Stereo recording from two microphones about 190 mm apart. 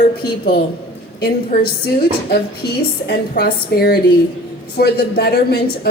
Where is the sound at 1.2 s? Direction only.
55° left (ahead or behind).